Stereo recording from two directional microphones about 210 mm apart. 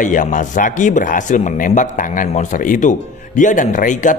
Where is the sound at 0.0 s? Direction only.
40° left (ahead or behind).